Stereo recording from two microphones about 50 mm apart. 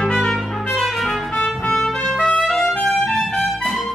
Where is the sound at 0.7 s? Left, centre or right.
Centre.